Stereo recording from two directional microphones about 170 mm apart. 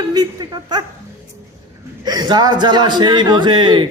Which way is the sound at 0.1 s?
25° right (ahead or behind).